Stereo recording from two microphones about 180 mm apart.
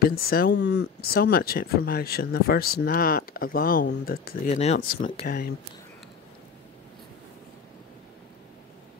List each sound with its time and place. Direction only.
0.0 s speech: 55° left (ahead or behind)
4.5 s speech: 35° left (ahead or behind)
4.7 s speech: 55° left (ahead or behind)